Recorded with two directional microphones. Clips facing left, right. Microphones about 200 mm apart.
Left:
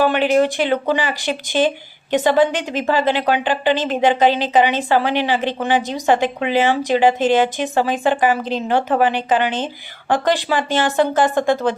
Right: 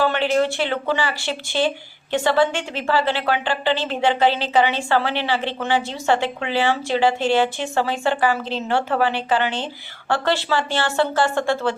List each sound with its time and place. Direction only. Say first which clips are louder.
0.0 s a woman's voice: left 4 dB; 15° left (ahead or behind)